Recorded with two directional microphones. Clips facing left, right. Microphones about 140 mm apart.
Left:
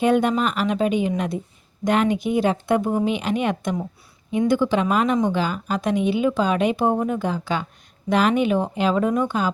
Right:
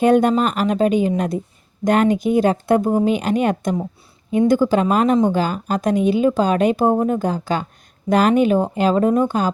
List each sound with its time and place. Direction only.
0.0 s speech: 45° right (ahead or behind)